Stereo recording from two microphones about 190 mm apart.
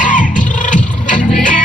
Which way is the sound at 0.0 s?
45° left (ahead or behind).